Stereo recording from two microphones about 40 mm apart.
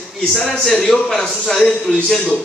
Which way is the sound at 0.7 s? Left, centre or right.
Centre.